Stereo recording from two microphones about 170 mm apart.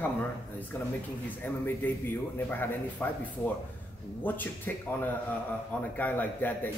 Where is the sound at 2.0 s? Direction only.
10° left (ahead or behind).